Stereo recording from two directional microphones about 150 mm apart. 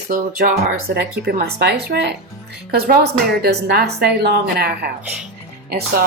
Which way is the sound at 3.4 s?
90° right.